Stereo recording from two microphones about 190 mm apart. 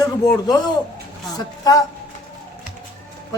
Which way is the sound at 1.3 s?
20° left (ahead or behind).